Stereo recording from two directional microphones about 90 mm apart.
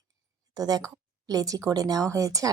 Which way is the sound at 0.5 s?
45° right (ahead or behind).